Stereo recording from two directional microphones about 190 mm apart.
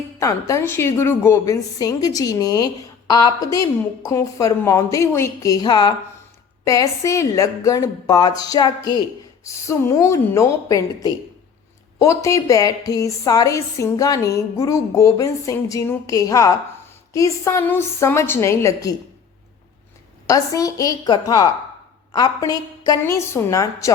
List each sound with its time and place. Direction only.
0.2 s a woman's voice: 15° left (ahead or behind)
20.2 s a woman's voice: 15° left (ahead or behind)